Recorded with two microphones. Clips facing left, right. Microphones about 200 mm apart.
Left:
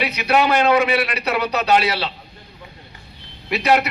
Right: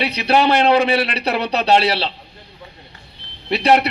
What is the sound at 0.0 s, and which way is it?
A man's voice, 30° right (ahead or behind).